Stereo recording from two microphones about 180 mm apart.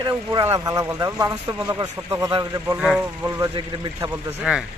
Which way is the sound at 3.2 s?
20° right (ahead or behind).